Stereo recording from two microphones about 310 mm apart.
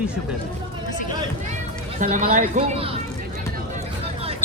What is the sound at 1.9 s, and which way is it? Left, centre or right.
Speech, right.